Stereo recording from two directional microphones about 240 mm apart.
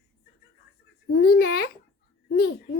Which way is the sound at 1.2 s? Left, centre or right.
Left.